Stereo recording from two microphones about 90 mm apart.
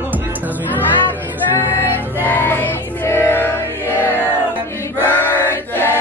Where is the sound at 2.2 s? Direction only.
20° left (ahead or behind).